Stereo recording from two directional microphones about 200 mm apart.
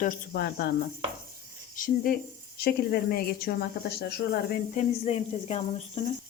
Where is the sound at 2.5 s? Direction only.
55° left (ahead or behind).